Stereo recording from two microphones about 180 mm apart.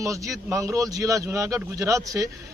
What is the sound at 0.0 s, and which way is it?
Speech, 15° right (ahead or behind).